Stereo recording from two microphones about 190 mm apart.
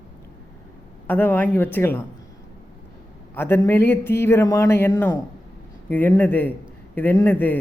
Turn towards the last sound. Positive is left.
turn(degrees=10)  # may be behind; listen again after turning